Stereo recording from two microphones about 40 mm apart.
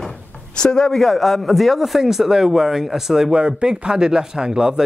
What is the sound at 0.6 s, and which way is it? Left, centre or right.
Speech, left.